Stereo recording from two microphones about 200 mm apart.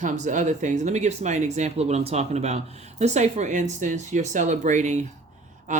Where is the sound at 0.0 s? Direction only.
40° right (ahead or behind).